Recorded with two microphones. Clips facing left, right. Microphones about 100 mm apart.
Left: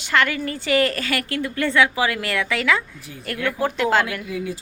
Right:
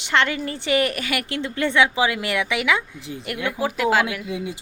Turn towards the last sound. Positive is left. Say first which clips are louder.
# left 1 dB
turn(degrees=-20)  # may be behind; listen again after turning